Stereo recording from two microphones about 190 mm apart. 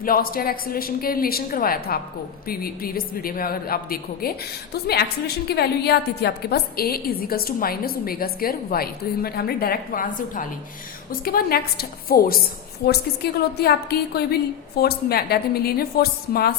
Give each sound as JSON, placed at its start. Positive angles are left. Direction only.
{"t": 0.0, "sound": "a woman's voice", "side_deg": 50}